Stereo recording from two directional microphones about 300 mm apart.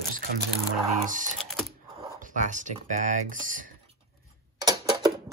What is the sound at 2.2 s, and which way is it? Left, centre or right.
Speech, right.